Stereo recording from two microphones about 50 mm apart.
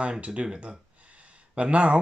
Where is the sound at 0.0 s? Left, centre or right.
Right.